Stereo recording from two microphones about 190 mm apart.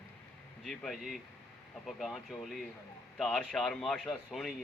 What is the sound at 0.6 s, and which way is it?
A man's voice, centre (ahead or behind).